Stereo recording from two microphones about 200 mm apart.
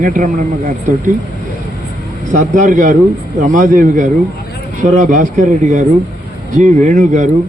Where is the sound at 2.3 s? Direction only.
40° right (ahead or behind).